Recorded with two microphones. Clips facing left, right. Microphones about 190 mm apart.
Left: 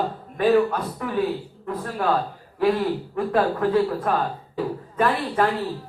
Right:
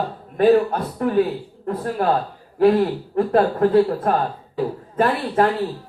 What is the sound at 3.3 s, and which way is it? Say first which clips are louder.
A woman's voice: right 4 dB; 45° right (ahead or behind).